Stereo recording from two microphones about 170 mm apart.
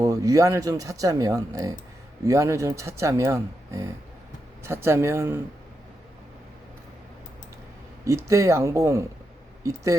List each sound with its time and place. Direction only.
0.0 s speech: 20° right (ahead or behind)
8.0 s speech: 15° right (ahead or behind)